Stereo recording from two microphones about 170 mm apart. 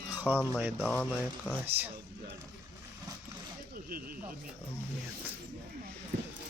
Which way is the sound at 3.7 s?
60° right (ahead or behind).